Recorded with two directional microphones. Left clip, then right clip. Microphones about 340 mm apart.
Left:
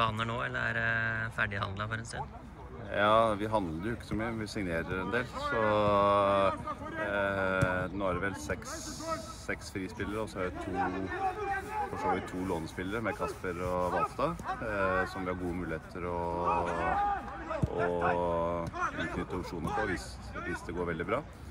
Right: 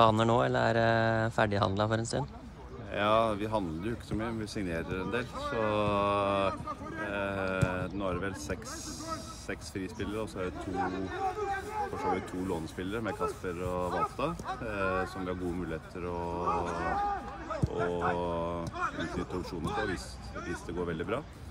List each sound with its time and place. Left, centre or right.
0.0 s speech: centre
10.8 s speech: left
12.4 s speech: centre
16.4 s speech: left
18.1 s speech: centre
18.8 s speech: left
20.8 s speech: centre